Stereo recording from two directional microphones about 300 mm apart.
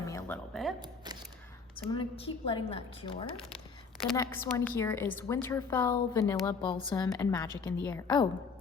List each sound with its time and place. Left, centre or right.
0.0 s music: centre
1.9 s a woman's voice: centre
4.0 s a woman's voice: centre